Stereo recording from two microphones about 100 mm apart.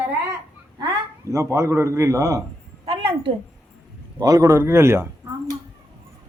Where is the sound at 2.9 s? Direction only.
60° right (ahead or behind).